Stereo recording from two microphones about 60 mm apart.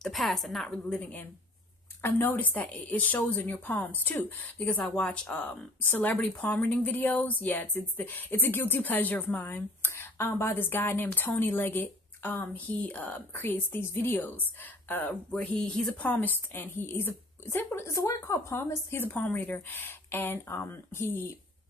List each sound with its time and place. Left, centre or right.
0.0 s a woman's voice: centre
0.7 s speech: centre
2.0 s speech: left; by 5.6 s centre
5.8 s speech: left
13.3 s speech: left
15.3 s speech: centre
16.0 s speech: left
17.8 s a woman's voice: left
19.0 s speech: left
19.3 s speech: left